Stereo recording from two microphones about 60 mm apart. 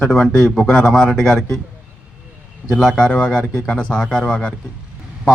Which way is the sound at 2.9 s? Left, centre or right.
Centre.